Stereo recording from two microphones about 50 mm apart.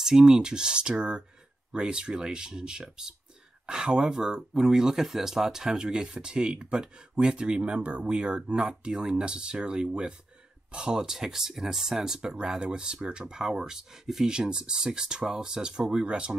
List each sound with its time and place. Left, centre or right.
0.0 s speech: centre